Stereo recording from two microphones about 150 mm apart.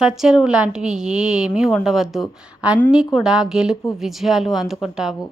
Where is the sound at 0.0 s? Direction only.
5° right (ahead or behind).